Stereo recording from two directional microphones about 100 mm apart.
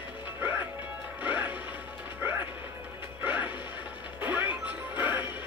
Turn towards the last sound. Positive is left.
turn(degrees=-15)  # may be behind; listen again after turning